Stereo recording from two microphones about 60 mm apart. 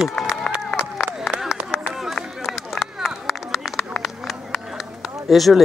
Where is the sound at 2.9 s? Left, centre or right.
Centre.